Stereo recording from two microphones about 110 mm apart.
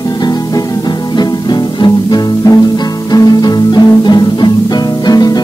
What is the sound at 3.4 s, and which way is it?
Music, 40° left (ahead or behind).